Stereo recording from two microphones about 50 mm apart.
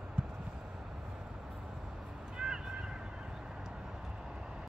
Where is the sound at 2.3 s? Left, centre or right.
Centre.